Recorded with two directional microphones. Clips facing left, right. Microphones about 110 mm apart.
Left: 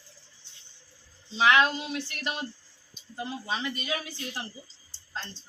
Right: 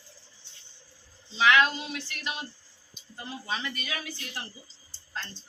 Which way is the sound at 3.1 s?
25° left (ahead or behind).